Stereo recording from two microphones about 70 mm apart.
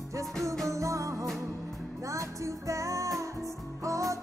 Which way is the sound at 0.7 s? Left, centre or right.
Right.